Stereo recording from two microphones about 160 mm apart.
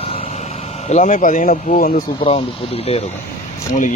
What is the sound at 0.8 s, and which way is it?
Speech, 50° left (ahead or behind).